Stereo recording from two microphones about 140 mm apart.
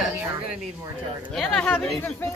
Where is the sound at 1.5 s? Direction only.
5° left (ahead or behind).